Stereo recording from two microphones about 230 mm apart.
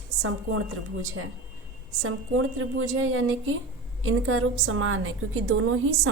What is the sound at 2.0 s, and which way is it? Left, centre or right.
A woman's voice, right.